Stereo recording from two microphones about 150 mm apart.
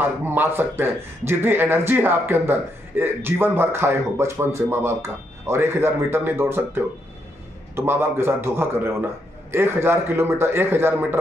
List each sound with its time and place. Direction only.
0.0 s a man's voice: 15° right (ahead or behind)